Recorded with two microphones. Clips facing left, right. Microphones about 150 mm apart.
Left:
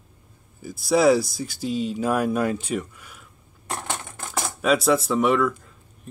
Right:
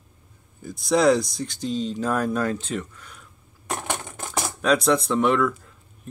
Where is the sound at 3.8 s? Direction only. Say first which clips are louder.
Right 2 dB; 15° right (ahead or behind).